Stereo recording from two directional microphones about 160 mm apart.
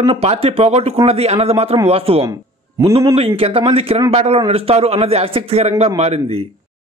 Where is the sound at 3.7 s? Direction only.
35° right (ahead or behind).